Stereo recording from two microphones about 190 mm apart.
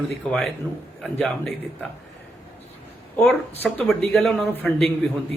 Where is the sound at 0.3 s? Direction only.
Centre (ahead or behind).